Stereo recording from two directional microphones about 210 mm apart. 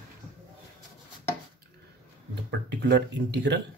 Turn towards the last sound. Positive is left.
turn(degrees=-55)  # may be behind; listen again after turning